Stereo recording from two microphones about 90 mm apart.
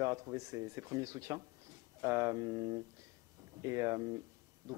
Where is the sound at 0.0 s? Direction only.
35° right (ahead or behind).